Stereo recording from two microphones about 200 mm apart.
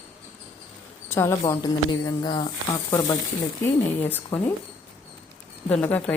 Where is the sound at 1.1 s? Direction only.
15° left (ahead or behind).